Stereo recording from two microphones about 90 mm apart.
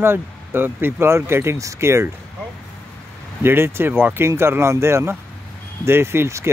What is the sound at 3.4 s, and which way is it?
Speech, 25° right (ahead or behind).